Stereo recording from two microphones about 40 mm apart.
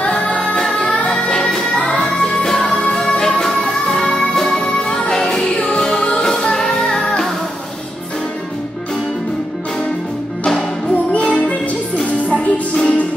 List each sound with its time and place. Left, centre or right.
0.0 s music: left
11.1 s music: left